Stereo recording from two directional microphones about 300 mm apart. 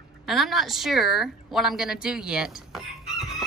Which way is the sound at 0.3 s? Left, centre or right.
Centre.